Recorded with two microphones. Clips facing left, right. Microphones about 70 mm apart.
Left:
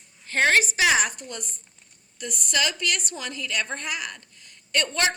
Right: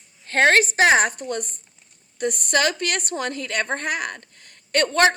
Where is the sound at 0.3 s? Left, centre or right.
Right.